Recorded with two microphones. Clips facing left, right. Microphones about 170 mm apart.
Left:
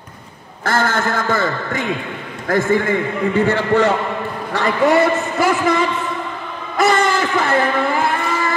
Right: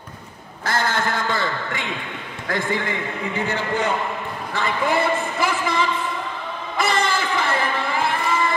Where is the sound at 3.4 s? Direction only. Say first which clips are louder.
Left 7 dB; 65° left (ahead or behind).